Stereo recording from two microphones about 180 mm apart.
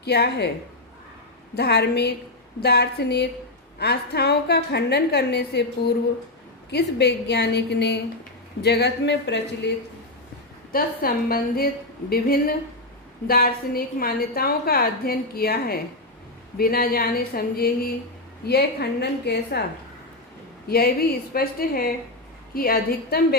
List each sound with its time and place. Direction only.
0.0 s a woman's voice: 65° left (ahead or behind)
1.5 s a woman's voice: 65° left (ahead or behind)
10.7 s a woman's voice: 55° left (ahead or behind)
20.7 s a woman's voice: 60° left (ahead or behind)